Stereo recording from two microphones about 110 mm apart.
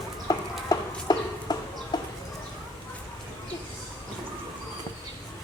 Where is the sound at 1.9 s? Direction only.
40° left (ahead or behind).